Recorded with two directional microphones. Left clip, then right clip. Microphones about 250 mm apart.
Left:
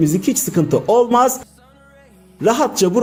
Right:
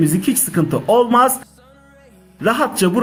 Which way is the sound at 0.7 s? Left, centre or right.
Centre.